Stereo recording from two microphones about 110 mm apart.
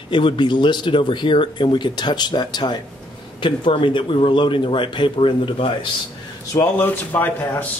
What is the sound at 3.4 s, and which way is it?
Speech, 50° left (ahead or behind).